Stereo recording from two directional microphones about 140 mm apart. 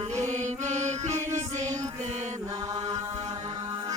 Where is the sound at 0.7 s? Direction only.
55° right (ahead or behind).